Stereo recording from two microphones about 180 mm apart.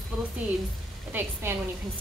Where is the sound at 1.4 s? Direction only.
15° right (ahead or behind).